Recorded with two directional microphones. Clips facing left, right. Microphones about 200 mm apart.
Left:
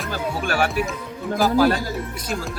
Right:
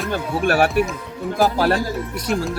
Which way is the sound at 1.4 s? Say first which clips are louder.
Right 2 dB; centre (ahead or behind).